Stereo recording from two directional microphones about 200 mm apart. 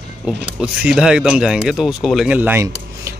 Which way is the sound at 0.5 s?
5° right (ahead or behind).